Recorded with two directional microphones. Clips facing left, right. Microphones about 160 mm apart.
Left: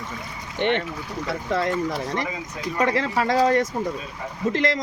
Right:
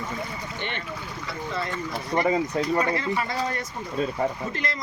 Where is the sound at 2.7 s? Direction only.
90° left.